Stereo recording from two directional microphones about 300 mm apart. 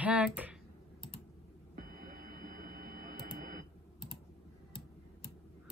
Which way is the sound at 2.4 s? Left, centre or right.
Right.